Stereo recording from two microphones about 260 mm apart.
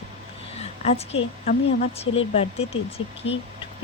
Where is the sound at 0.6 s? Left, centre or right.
Left.